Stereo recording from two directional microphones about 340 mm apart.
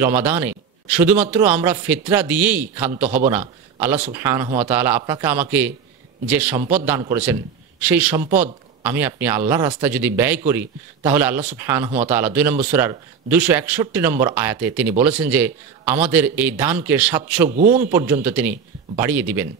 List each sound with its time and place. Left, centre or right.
0.0 s a man's voice: centre
17.6 s a man's voice: right
17.9 s a man's voice: centre